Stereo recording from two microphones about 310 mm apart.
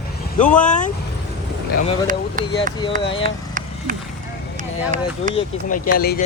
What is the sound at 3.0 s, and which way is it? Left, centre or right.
Speech, centre.